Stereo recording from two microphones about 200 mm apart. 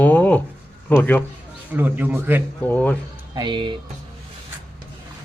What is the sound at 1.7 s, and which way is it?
Speech, 10° right (ahead or behind).